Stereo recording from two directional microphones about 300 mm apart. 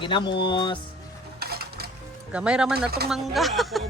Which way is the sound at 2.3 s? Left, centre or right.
Centre.